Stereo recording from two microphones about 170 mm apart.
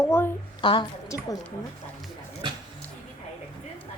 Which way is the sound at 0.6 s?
30° left (ahead or behind).